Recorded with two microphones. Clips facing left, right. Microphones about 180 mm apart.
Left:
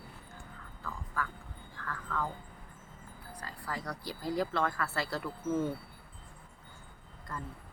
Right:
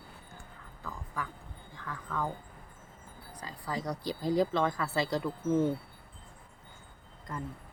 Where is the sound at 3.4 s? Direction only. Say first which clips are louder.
Right 4 dB; 15° right (ahead or behind).